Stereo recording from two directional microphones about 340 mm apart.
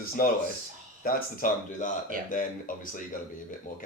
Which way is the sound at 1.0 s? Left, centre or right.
Left.